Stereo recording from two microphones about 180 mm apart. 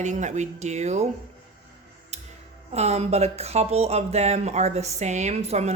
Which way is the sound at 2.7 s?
35° right (ahead or behind).